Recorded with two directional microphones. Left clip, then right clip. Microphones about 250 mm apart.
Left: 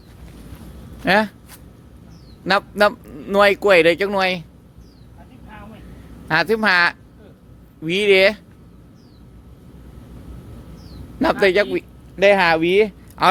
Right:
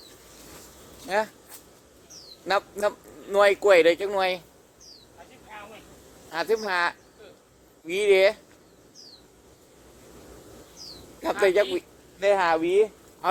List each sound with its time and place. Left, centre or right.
1.0 s speech: left
2.4 s speech: left
6.3 s speech: left
11.2 s speech: left
12.2 s speech: left